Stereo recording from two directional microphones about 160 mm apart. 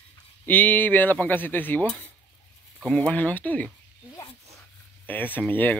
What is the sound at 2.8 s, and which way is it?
Speech, 10° left (ahead or behind).